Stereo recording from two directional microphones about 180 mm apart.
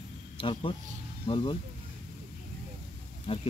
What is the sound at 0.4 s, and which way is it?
Speech, 30° left (ahead or behind).